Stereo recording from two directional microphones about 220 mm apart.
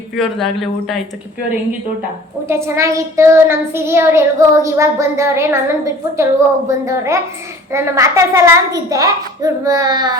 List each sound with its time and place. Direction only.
0.2 s a man's voice: centre (ahead or behind)
2.5 s child singing: 10° right (ahead or behind)